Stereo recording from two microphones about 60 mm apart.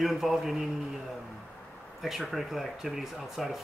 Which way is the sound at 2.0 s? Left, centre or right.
Centre.